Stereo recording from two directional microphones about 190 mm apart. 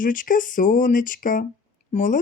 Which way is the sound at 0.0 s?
45° left (ahead or behind).